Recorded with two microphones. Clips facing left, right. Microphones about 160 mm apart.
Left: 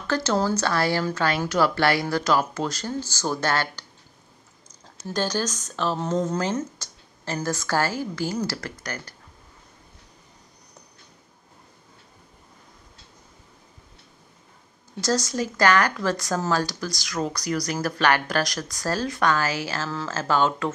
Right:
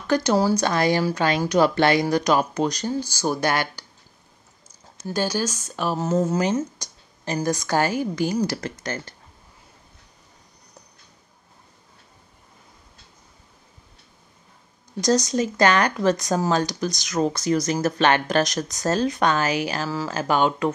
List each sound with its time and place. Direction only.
0.0 s speech: 15° right (ahead or behind)
5.0 s speech: 10° right (ahead or behind)
15.0 s speech: 20° right (ahead or behind)